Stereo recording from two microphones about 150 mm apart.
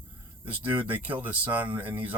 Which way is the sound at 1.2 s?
10° right (ahead or behind).